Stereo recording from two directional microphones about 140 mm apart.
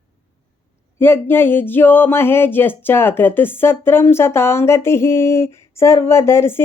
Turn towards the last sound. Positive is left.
turn(degrees=20)  # may be behind; listen again after turning